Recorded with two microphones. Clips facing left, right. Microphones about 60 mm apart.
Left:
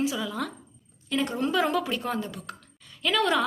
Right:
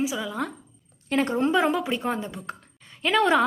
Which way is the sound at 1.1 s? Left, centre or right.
Right.